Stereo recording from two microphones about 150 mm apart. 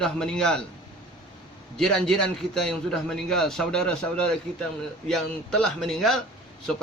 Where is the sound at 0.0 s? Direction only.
5° left (ahead or behind).